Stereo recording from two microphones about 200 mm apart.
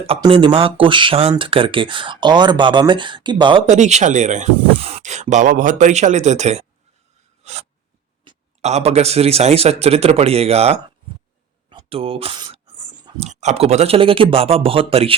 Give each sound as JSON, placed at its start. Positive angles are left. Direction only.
{"t": 0.0, "sound": "speech", "side_deg": -25}
{"t": 3.7, "sound": "speech", "side_deg": -35}
{"t": 7.4, "sound": "writing", "side_deg": -35}
{"t": 8.2, "sound": "speech", "side_deg": -30}